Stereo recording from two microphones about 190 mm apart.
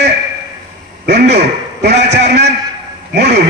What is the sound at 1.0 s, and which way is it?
Speech, 60° right (ahead or behind).